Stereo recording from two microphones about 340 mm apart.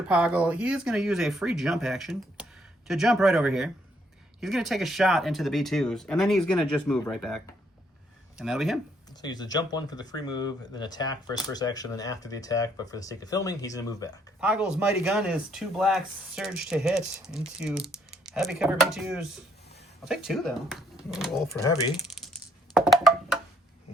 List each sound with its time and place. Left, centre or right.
0.1 s speech: centre
9.2 s speech: centre
14.4 s speech: centre
21.6 s speech: centre
22.7 s music: centre